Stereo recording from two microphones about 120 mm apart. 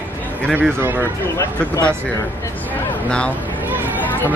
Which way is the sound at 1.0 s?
20° left (ahead or behind).